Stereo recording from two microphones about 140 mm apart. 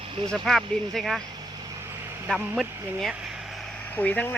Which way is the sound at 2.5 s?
Centre (ahead or behind).